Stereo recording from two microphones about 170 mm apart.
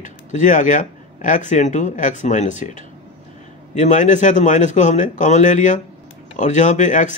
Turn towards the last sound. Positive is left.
turn(degrees=45)  # may be behind; listen again after turning